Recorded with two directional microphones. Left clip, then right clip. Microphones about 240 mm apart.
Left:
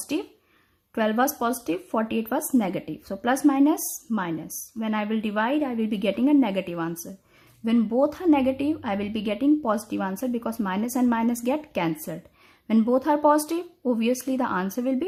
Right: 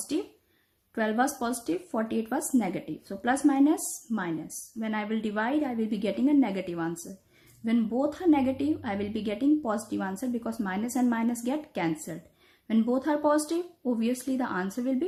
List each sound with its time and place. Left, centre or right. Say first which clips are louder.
0.1 s a woman's voice: left 2 dB; left